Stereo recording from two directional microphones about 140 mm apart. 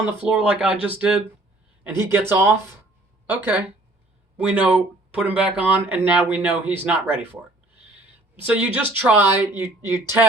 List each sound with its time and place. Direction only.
0.3 s speech: 5° right (ahead or behind)
8.4 s speech: 10° right (ahead or behind)